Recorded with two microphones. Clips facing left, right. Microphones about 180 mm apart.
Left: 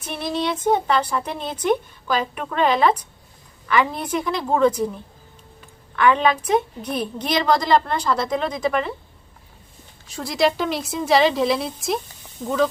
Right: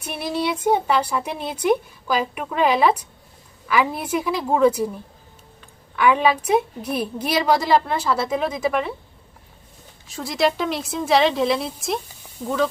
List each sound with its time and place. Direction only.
0.0 s a woman's voice: 10° right (ahead or behind)
6.0 s a woman's voice: 10° right (ahead or behind)
10.1 s a woman's voice: centre (ahead or behind)